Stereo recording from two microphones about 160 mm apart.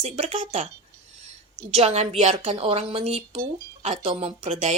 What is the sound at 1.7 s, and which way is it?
Speech, 40° right (ahead or behind).